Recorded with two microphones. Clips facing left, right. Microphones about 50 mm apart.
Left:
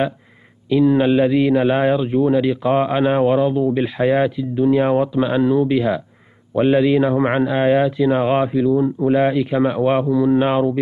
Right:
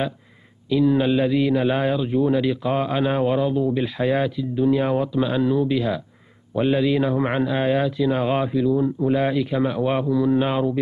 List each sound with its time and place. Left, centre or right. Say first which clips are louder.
0.7 s a man's voice: left 4 dB; left